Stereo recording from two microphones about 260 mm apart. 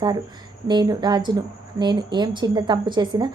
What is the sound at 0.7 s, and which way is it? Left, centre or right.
A woman's voice, centre.